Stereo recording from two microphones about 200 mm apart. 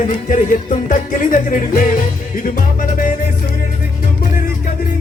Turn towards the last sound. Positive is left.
turn(degrees=45)  # may be behind; listen again after turning